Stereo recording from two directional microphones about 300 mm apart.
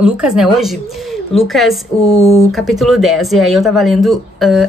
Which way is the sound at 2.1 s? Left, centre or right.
Centre.